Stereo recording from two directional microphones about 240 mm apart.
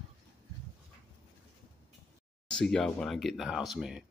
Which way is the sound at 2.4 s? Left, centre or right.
Centre.